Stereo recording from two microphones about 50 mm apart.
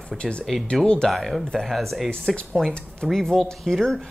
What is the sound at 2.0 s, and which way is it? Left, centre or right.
Speech, centre.